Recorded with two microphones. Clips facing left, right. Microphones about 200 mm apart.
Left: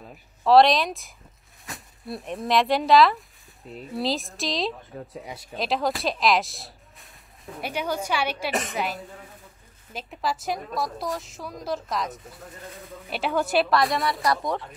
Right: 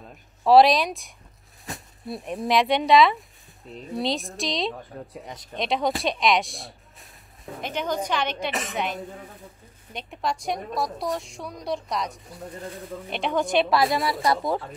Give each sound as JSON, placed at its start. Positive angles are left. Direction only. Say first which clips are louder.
{"t": 0.5, "sound": "a woman's voice", "louder": "right 1 dB", "side_deg": 0}